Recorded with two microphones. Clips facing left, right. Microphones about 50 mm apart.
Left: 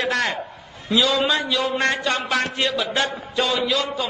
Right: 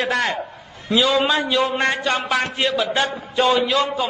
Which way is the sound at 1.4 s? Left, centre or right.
Right.